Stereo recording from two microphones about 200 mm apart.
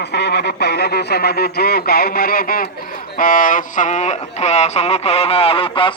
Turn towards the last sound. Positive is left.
turn(degrees=25)  # may be behind; listen again after turning